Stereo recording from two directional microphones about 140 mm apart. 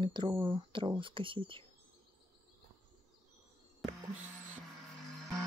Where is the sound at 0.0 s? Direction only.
35° right (ahead or behind).